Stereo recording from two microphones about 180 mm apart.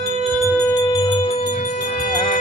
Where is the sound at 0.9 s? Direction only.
25° left (ahead or behind).